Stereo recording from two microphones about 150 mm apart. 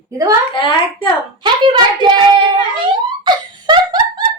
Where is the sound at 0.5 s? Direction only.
35° left (ahead or behind).